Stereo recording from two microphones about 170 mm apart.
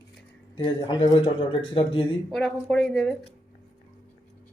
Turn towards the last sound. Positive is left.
turn(degrees=0)  # may be behind; listen again after turning